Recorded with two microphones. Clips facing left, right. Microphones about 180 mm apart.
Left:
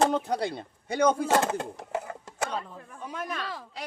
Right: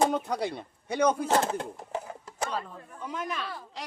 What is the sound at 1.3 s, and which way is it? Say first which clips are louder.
Speech: left 1 dB; 70° left (ahead or behind).